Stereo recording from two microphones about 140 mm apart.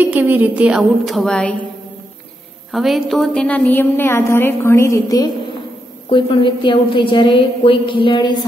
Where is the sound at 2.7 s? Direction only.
Centre (ahead or behind); by 5.3 s 25° left (ahead or behind).